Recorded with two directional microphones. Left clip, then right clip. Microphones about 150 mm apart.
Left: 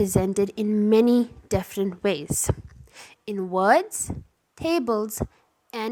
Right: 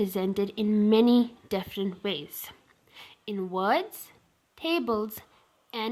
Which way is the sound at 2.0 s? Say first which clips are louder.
Left 8 dB; 45° left (ahead or behind).